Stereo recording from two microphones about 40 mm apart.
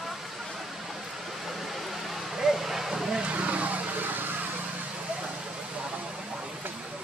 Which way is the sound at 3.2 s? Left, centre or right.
Right.